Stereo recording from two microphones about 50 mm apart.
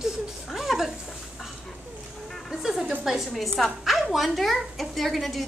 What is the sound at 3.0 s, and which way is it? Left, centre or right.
A woman's voice, centre.